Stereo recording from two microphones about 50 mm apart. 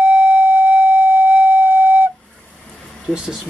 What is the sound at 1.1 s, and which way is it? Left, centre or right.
Flute, right.